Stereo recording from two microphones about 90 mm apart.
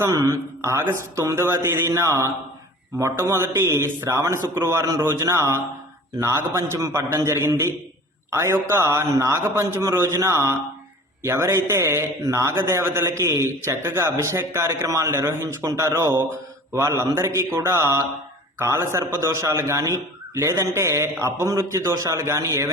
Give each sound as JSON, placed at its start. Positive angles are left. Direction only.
{"t": 0.1, "sound": "a man's voice", "side_deg": -35}